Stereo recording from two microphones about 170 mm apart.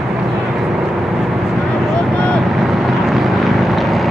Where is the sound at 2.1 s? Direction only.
5° left (ahead or behind).